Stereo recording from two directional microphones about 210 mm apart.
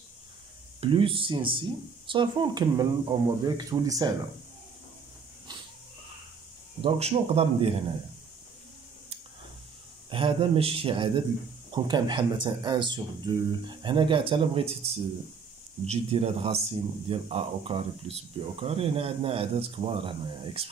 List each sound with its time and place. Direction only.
0.7 s speech: 25° right (ahead or behind)
6.8 s speech: 30° right (ahead or behind)
10.1 s speech: 25° right (ahead or behind)